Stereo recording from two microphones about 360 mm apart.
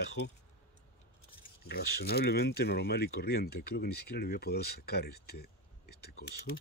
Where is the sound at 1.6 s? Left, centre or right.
Left.